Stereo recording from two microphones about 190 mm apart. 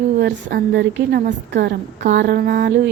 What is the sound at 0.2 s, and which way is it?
A woman's voice, 65° right (ahead or behind).